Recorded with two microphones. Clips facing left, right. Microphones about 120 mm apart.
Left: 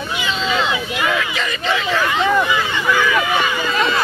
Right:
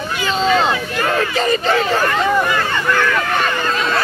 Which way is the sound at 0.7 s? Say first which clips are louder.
Right 2 dB; 10° left (ahead or behind).